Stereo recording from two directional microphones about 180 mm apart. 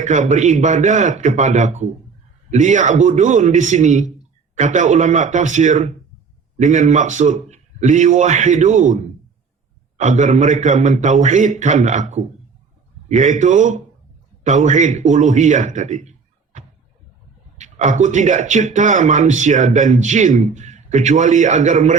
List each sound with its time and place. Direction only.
0.0 s speech: 40° right (ahead or behind)
10.0 s a man's voice: 40° right (ahead or behind)